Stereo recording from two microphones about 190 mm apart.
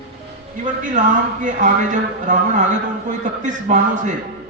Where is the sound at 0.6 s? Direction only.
40° right (ahead or behind).